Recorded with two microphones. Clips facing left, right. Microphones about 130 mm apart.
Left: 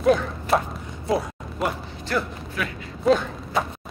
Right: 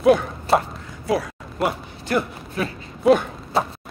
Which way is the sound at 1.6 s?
Centre (ahead or behind).